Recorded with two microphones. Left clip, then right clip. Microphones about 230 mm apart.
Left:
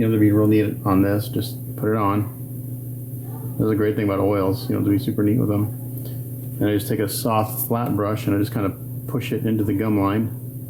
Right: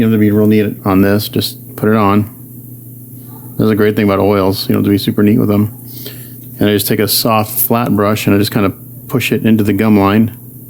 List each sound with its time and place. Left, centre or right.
0.0 s speech: right
3.6 s speech: right